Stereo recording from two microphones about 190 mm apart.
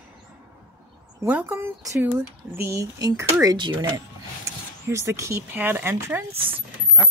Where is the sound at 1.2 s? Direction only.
10° right (ahead or behind).